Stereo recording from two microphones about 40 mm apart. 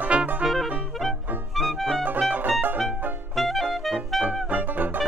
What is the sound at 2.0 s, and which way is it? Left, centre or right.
Music, right.